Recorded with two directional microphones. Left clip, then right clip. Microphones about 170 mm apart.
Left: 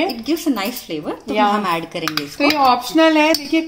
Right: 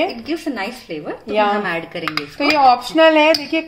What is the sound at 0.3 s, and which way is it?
Speech, 50° left (ahead or behind).